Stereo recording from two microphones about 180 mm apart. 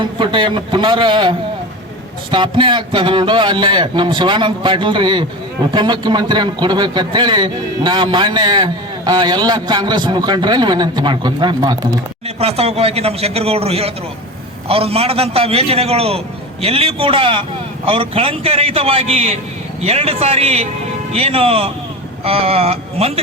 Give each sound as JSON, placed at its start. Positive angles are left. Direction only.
{"t": 0.0, "sound": "a man's voice", "side_deg": -25}
{"t": 12.4, "sound": "a man's voice", "side_deg": -35}